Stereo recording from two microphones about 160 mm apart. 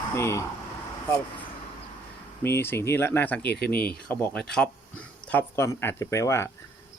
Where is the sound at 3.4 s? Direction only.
90° left.